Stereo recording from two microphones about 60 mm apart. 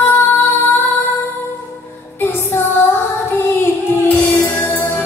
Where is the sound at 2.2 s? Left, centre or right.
Left.